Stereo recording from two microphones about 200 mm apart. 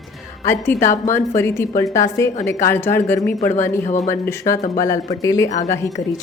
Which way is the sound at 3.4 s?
35° left (ahead or behind).